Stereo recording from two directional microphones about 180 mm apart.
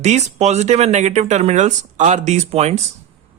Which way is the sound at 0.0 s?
40° right (ahead or behind).